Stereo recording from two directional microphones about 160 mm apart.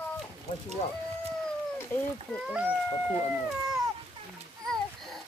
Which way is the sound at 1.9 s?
15° left (ahead or behind).